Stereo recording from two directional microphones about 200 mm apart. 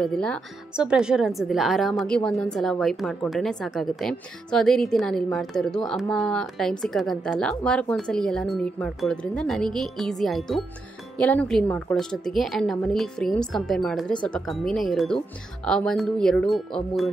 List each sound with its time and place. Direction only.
0.0 s a woman's voice: 5° left (ahead or behind)